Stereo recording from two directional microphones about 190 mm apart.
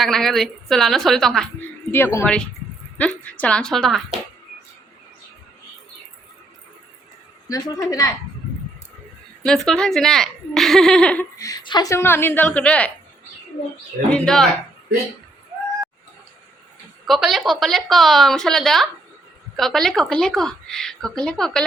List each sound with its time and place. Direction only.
0.0 s a woman's voice: centre (ahead or behind)
7.4 s speech: 20° left (ahead or behind)
9.4 s a woman's voice: 5° left (ahead or behind)
11.3 s speech: 20° left (ahead or behind)
14.1 s a woman's voice: 5° left (ahead or behind)
17.1 s a woman's voice: centre (ahead or behind)